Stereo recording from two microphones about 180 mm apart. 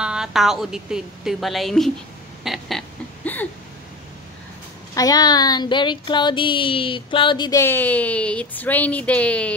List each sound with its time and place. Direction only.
0.0 s a woman's voice: 5° right (ahead or behind)
2.4 s a sound: centre (ahead or behind)
4.9 s speech: 20° left (ahead or behind)
7.6 s speech: 10° left (ahead or behind)